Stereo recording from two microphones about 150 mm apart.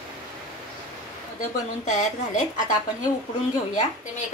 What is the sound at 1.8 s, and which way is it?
Speech, 60° left (ahead or behind).